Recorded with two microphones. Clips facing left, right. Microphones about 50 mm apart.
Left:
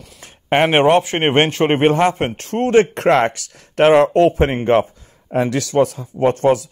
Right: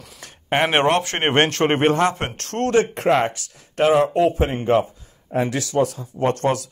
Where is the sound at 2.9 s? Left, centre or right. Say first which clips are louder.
Left 4 dB; left.